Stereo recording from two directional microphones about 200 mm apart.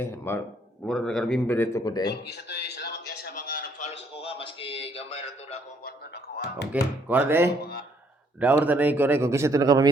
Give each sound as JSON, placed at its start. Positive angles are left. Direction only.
{"t": 0.0, "sound": "speech", "side_deg": 10}
{"t": 2.3, "sound": "a man's voice", "side_deg": 55}
{"t": 3.4, "sound": "a sound", "side_deg": 45}
{"t": 4.1, "sound": "a sound", "side_deg": 25}
{"t": 6.3, "sound": "a man's voice", "side_deg": 55}
{"t": 7.1, "sound": "speech", "side_deg": -10}
{"t": 7.6, "sound": "speech", "side_deg": 50}
{"t": 8.4, "sound": "speech", "side_deg": -10}